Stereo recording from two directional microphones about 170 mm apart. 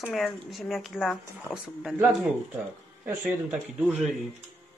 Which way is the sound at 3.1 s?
5° right (ahead or behind).